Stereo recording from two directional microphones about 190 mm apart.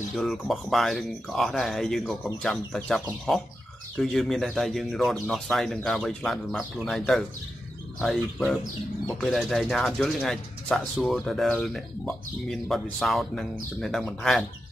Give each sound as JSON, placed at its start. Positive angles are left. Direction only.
{"t": 0.1, "sound": "speech", "side_deg": 0}